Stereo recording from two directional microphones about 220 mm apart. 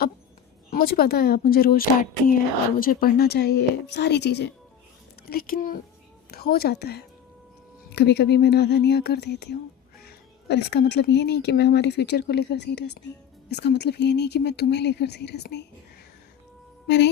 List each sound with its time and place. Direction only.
0.7 s speech: 45° left (ahead or behind)
16.8 s speech: 50° left (ahead or behind)